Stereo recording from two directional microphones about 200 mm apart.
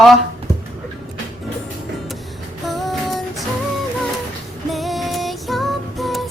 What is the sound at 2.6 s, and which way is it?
Music, centre (ahead or behind).